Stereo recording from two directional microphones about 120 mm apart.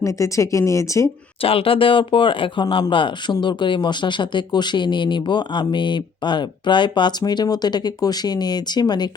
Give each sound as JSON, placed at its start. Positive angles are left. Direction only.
{"t": 0.0, "sound": "speech", "side_deg": 25}
{"t": 1.4, "sound": "speech", "side_deg": 50}